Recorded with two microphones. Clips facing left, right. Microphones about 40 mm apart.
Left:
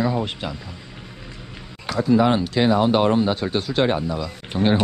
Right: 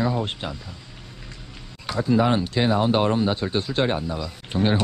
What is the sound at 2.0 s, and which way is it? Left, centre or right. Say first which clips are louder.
Speech: left 3 dB; left.